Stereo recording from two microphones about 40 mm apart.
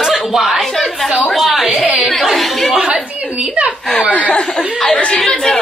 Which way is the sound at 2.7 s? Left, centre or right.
Right.